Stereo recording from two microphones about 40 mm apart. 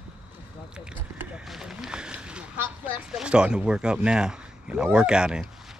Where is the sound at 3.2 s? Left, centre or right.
Right.